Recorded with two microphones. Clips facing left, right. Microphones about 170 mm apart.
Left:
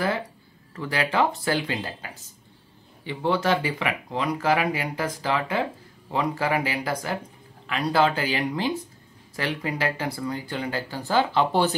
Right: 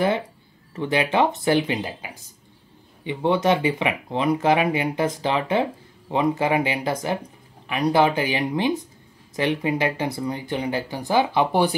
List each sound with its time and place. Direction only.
0.7 s speech: 20° right (ahead or behind)